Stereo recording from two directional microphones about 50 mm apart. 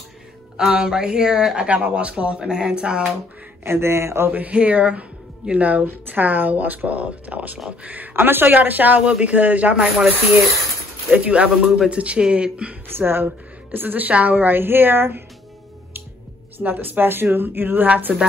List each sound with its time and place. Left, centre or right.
0.6 s a woman's voice: centre
3.6 s speech: right
4.3 s speech: right
9.0 s speech: right
11.1 s speech: right
11.6 s a woman's voice: centre
11.9 s speech: right
12.9 s a woman's voice: right
16.5 s a woman's voice: right
17.8 s speech: right